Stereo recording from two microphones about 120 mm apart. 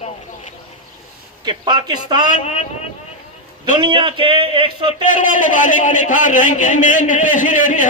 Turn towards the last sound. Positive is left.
turn(degrees=90)